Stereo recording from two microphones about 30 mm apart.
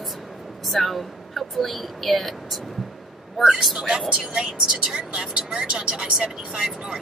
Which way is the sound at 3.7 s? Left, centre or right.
Right.